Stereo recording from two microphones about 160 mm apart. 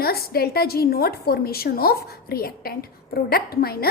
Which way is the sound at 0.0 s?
75° left (ahead or behind).